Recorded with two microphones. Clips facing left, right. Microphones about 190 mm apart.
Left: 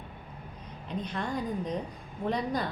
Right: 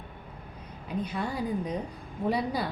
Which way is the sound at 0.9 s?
10° right (ahead or behind).